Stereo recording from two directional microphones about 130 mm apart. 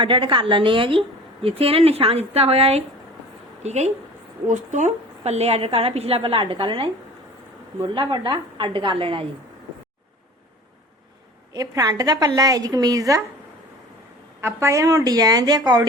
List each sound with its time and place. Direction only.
0.0 s a woman's voice: 40° right (ahead or behind); by 3.9 s 60° right (ahead or behind)
4.4 s speech: 70° right (ahead or behind); by 6.9 s 40° right (ahead or behind)
7.9 s a woman's voice: 35° right (ahead or behind)
11.5 s a woman's voice: 25° right (ahead or behind)
14.4 s a woman's voice: 20° right (ahead or behind)